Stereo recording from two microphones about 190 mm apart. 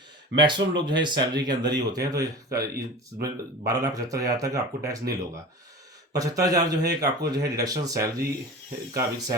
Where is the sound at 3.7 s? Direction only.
20° right (ahead or behind).